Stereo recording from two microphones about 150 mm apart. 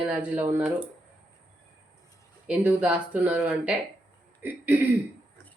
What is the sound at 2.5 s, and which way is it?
Speech, 10° right (ahead or behind).